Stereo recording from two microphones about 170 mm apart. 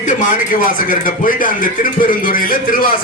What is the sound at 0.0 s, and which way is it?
A man's voice, 50° left (ahead or behind).